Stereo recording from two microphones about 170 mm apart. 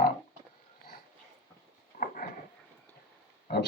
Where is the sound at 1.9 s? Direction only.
55° left (ahead or behind).